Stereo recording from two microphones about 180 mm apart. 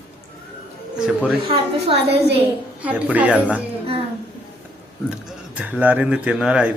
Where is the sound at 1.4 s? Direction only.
30° right (ahead or behind).